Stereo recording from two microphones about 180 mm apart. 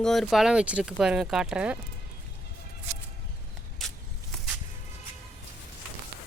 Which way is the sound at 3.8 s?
Centre (ahead or behind).